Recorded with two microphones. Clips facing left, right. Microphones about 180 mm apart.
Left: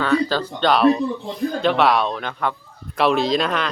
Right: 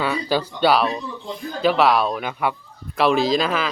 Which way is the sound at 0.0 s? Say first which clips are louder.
Left 3 dB; 10° right (ahead or behind).